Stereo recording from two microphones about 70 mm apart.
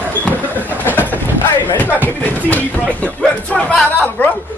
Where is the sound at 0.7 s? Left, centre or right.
Left.